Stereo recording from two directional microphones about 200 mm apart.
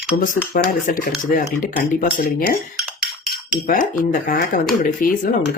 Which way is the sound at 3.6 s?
40° left (ahead or behind).